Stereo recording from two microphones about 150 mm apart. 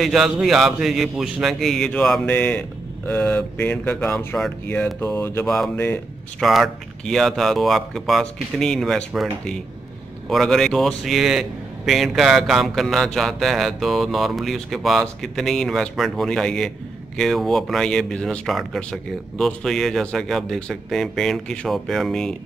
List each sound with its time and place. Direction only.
0.0 s a man's voice: centre (ahead or behind); by 5.5 s 15° left (ahead or behind)
6.4 s a man's voice: centre (ahead or behind)